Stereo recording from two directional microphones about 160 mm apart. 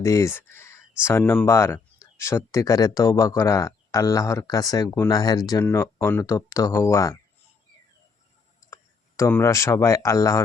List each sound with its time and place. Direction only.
0.0 s speech: 20° left (ahead or behind)
8.6 s speech: 20° left (ahead or behind)